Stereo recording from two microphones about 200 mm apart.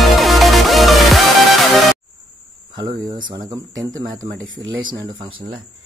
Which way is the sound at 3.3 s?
20° right (ahead or behind).